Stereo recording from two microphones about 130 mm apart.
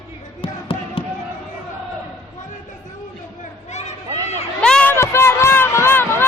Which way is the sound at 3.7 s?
60° left (ahead or behind).